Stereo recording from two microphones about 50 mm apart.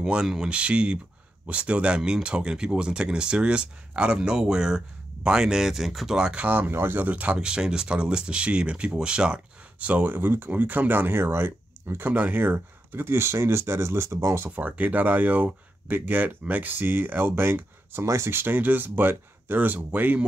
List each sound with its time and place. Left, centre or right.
0.0 s speech: centre
6.1 s speech: centre
6.4 s speech: right
6.7 s speech: right
7.0 s speech: right
7.3 s speech: centre
10.1 s speech: right
14.5 s speech: right
18.0 s speech: right
18.3 s speech: right